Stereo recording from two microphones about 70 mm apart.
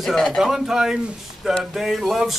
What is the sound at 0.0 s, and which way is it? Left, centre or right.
Speech, centre.